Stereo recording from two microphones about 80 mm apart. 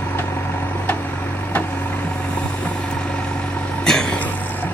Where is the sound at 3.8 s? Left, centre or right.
Centre.